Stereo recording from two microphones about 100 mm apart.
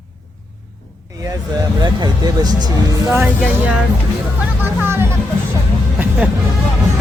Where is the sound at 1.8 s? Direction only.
45° right (ahead or behind).